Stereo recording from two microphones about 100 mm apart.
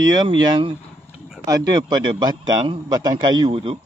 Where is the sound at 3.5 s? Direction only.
75° right (ahead or behind).